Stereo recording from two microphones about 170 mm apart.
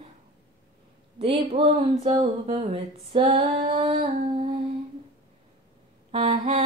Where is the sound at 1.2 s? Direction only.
35° right (ahead or behind).